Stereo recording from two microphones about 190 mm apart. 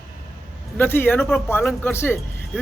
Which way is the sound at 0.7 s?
10° left (ahead or behind).